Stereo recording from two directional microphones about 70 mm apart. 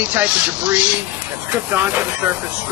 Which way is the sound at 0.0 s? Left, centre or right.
Centre.